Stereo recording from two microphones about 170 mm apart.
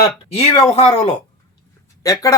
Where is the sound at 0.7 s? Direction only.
35° left (ahead or behind).